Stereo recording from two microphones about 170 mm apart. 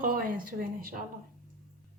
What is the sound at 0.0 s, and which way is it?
Speech, 50° right (ahead or behind).